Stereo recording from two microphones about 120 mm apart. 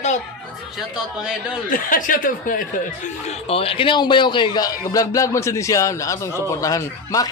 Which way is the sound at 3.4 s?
50° left (ahead or behind).